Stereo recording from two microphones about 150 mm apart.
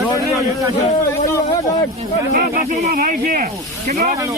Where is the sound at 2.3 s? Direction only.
55° right (ahead or behind).